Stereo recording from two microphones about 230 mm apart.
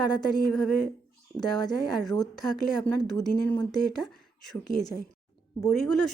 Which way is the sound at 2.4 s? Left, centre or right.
Centre.